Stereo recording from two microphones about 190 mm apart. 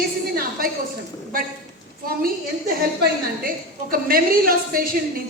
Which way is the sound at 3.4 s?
50° right (ahead or behind).